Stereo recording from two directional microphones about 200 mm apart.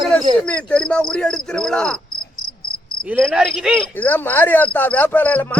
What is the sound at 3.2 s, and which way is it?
Speech, centre (ahead or behind).